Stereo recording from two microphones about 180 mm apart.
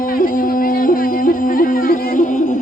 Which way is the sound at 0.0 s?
50° left (ahead or behind).